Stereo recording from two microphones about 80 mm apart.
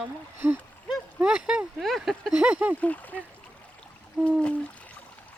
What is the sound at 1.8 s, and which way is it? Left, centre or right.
Speech, centre.